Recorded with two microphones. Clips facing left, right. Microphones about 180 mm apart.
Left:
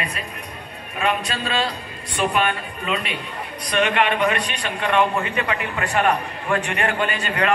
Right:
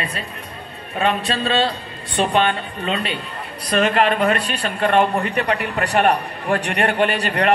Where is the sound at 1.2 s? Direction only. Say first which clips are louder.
Right 5 dB; 30° right (ahead or behind).